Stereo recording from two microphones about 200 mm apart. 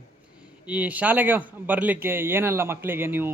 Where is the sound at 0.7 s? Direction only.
5° right (ahead or behind).